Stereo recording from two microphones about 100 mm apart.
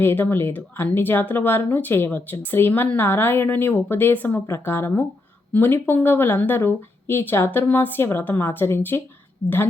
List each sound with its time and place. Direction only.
0.0 s speech: 20° left (ahead or behind)